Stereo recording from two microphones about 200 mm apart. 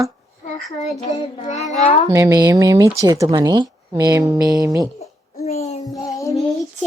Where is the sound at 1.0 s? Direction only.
35° left (ahead or behind).